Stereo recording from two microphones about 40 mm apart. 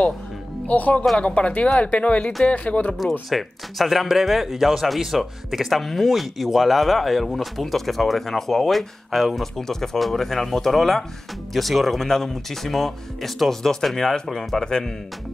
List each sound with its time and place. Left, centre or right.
0.7 s speech: left
3.0 s speech: centre